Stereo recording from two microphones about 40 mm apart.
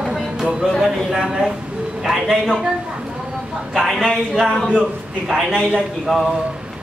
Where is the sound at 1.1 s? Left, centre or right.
Centre.